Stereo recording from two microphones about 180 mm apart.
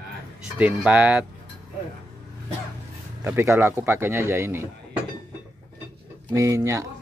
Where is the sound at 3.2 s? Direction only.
15° right (ahead or behind).